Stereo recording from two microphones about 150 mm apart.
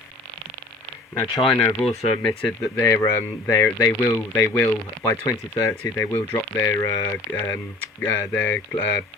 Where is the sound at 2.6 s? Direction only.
20° left (ahead or behind).